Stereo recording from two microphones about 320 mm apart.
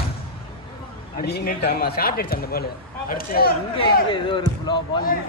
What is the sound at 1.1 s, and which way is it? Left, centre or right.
Speech, left.